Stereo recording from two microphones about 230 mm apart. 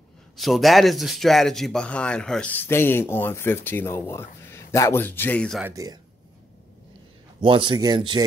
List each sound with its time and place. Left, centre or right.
0.4 s a man's voice: centre
5.7 s speech: centre
7.4 s a man's voice: right